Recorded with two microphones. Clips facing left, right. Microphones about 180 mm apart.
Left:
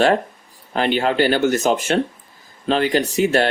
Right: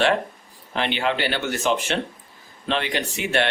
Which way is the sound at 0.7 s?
40° left (ahead or behind).